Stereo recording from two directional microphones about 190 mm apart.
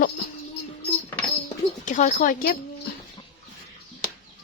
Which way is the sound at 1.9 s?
40° left (ahead or behind).